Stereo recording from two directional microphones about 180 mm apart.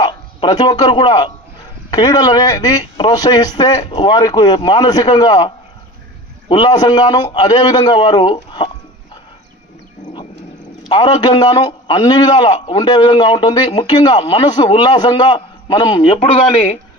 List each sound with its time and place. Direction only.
0.0 s a man's voice: 25° left (ahead or behind)
6.5 s a man's voice: 25° left (ahead or behind)
10.8 s a man's voice: 25° left (ahead or behind)